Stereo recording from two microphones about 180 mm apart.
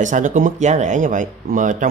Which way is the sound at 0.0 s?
45° right (ahead or behind).